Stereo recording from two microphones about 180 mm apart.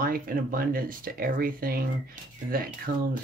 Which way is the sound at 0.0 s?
55° right (ahead or behind).